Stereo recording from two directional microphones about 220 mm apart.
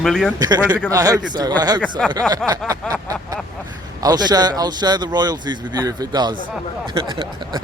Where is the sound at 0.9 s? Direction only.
15° right (ahead or behind).